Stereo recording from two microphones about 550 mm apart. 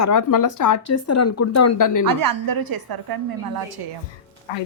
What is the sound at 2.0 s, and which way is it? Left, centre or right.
A woman's voice, right.